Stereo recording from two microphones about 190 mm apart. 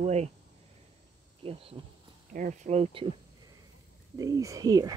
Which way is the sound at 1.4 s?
30° right (ahead or behind).